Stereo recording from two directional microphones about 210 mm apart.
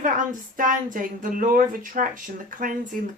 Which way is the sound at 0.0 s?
40° right (ahead or behind).